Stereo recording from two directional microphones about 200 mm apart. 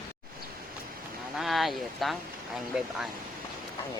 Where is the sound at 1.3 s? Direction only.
Centre (ahead or behind).